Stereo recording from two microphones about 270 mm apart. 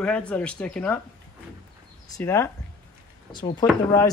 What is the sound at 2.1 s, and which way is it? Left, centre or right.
Speech, centre.